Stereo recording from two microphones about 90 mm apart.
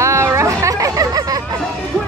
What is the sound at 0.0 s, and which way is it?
Chatter, 30° right (ahead or behind).